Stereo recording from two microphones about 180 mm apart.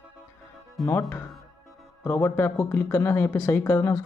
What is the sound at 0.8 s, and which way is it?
Speech, 15° left (ahead or behind).